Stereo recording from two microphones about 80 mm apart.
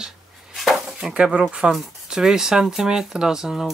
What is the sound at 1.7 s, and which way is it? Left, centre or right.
Speech, centre.